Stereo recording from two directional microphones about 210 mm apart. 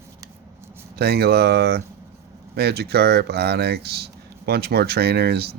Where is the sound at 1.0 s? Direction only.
50° right (ahead or behind).